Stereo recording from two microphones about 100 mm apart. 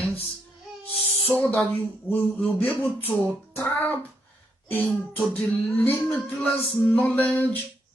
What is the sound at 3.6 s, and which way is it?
Music, 20° left (ahead or behind).